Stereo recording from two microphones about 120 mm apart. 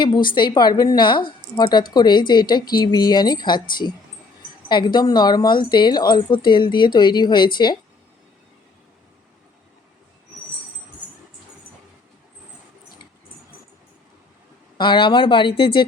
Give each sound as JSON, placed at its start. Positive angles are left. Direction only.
{"t": 0.0, "sound": "a woman's voice", "side_deg": 40}
{"t": 14.8, "sound": "speech", "side_deg": 40}